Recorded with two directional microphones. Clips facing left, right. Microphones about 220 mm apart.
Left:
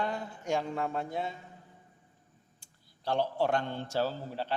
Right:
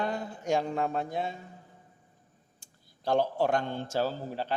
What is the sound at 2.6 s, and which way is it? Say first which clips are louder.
A woman's voice: right 3 dB; 45° right (ahead or behind).